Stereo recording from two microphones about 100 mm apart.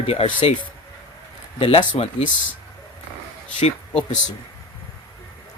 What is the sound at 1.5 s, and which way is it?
Speech, 70° left (ahead or behind).